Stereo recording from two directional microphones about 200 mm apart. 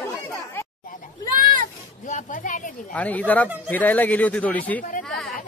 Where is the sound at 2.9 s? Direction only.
5° left (ahead or behind).